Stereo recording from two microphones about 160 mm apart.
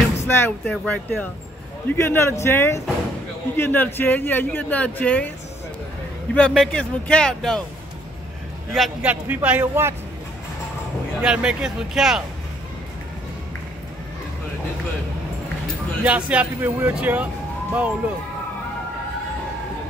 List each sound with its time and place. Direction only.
0.3 s speech: 10° left (ahead or behind)
6.3 s speech: 5° left (ahead or behind)
8.7 s speech: centre (ahead or behind)
11.2 s speech: 5° right (ahead or behind)
16.0 s speech: 10° right (ahead or behind)